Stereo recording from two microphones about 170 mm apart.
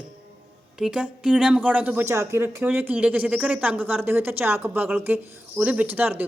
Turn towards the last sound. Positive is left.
turn(degrees=-10)  # may be behind; listen again after turning